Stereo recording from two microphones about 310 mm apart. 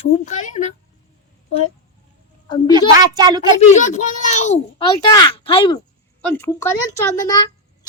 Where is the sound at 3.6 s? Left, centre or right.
Left.